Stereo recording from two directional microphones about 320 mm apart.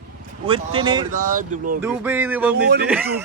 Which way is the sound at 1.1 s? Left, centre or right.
Right.